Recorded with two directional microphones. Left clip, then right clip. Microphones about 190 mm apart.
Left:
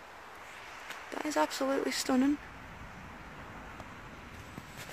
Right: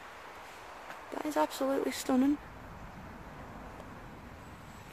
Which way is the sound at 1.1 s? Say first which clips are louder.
Even; centre (ahead or behind).